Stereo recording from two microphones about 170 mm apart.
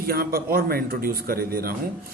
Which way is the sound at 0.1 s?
60° right (ahead or behind).